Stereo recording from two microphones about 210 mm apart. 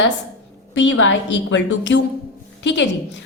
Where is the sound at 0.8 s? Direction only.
60° left (ahead or behind).